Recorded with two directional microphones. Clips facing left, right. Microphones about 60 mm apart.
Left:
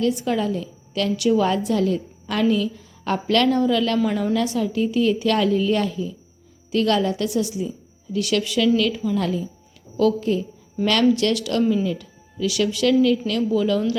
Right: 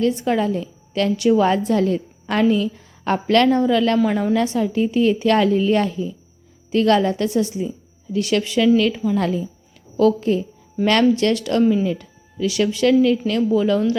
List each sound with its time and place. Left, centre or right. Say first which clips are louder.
0.0 s a woman's voice: right 3 dB; right